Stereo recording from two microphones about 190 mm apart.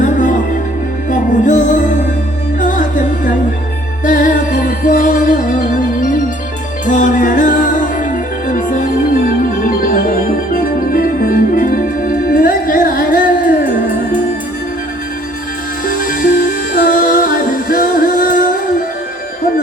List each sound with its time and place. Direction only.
0.0 s music: 40° left (ahead or behind)
6.8 s music: 40° left (ahead or behind)
10.5 s organ: 50° left (ahead or behind)
15.9 s music: 45° left (ahead or behind)